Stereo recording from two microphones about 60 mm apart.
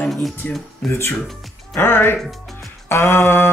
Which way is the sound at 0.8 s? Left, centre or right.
Left.